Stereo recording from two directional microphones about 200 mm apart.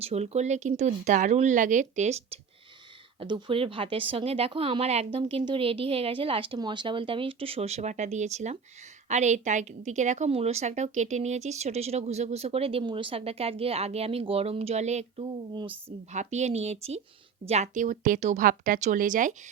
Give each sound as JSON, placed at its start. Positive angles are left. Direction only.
{"t": 0.0, "sound": "a woman's voice", "side_deg": -35}